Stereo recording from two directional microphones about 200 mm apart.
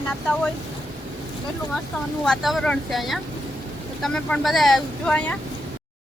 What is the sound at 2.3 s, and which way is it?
Speech, centre (ahead or behind).